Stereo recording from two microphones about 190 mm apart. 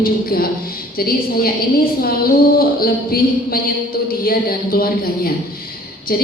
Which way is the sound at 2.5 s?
50° left (ahead or behind).